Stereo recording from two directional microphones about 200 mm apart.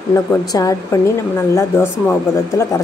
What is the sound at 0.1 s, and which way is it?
Speech, 15° left (ahead or behind).